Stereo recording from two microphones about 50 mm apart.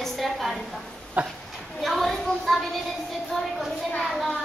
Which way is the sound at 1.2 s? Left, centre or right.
Right.